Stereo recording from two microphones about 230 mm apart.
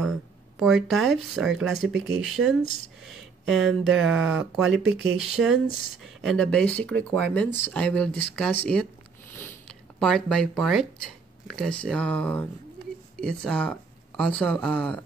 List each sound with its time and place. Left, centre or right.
0.6 s speech: centre
4.6 s speech: right
5.1 s speech: centre
9.3 s zipper: centre
11.4 s speech: centre